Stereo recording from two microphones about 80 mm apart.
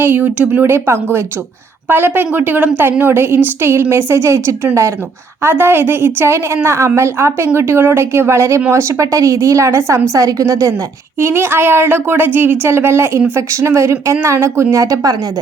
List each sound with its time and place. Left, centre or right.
0.0 s speech: right
11.2 s speech: right